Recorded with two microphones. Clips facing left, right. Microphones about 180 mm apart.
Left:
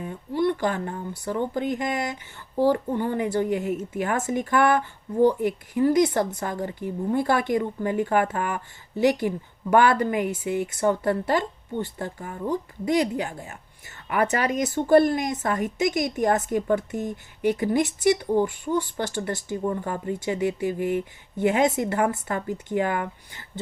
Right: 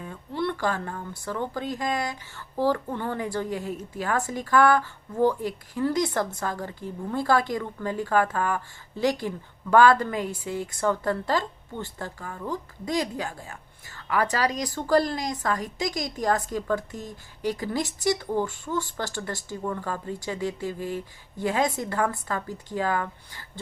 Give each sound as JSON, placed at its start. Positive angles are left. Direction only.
{"t": 0.0, "sound": "a woman's voice", "side_deg": 20}